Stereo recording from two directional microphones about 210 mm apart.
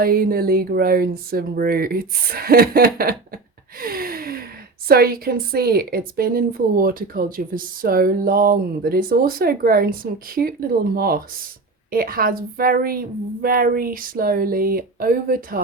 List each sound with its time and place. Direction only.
0.0 s a woman's voice: 45° right (ahead or behind)
3.8 s gasp: 45° right (ahead or behind)
4.9 s a woman's voice: 45° right (ahead or behind)